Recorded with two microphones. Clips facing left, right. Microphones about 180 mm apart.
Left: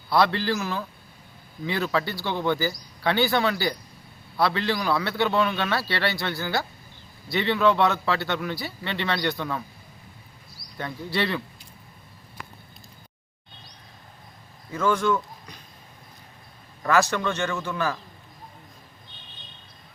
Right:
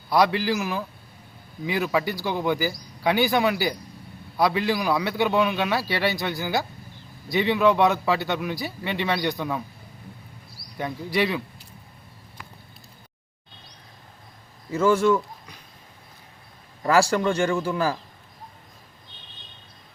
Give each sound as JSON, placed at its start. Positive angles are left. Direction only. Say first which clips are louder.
{"t": 0.1, "sound": "speech", "louder": "right 1 dB", "side_deg": -10}
{"t": 10.8, "sound": "speech", "louder": "right 3 dB", "side_deg": -15}
{"t": 14.7, "sound": "a man's voice", "louder": "right 4 dB", "side_deg": -25}
{"t": 17.1, "sound": "a man's voice", "louder": "right 5 dB", "side_deg": -30}